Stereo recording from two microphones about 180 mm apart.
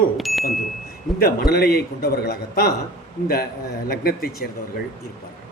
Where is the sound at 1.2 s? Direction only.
60° left (ahead or behind).